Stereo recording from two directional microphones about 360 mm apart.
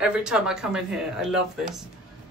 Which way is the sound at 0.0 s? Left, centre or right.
Centre.